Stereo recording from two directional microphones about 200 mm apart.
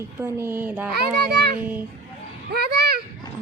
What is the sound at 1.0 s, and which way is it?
Speech, 55° right (ahead or behind).